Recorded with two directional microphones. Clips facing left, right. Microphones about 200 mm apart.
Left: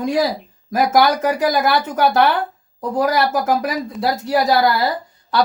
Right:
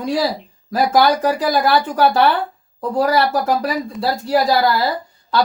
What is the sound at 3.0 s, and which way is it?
Speech, 15° left (ahead or behind).